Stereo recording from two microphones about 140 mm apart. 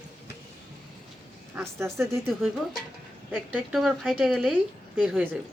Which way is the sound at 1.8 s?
20° right (ahead or behind).